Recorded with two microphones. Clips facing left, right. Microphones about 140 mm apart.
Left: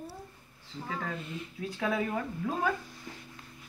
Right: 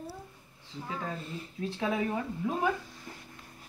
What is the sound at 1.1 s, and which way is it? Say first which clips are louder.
Speech: even; 35° right (ahead or behind).